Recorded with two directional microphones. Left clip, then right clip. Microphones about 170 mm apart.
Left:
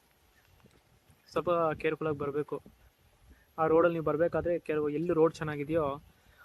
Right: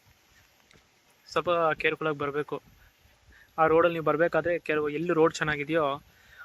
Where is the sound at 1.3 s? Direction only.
5° left (ahead or behind).